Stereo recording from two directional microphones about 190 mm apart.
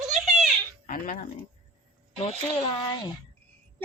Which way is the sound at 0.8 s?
45° left (ahead or behind).